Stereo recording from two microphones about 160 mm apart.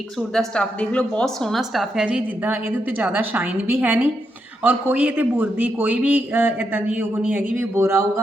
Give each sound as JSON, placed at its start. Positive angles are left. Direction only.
{"t": 0.2, "sound": "a woman's voice", "side_deg": 5}